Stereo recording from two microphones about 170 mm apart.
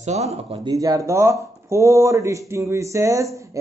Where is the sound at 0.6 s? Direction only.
20° right (ahead or behind).